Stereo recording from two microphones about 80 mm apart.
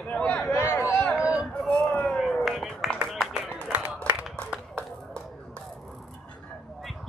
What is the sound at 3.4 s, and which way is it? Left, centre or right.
Music, centre.